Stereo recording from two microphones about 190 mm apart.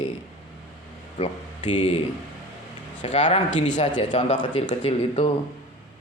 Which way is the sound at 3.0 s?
40° left (ahead or behind).